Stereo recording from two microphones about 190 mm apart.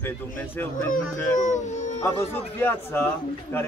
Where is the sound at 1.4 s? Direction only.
40° left (ahead or behind).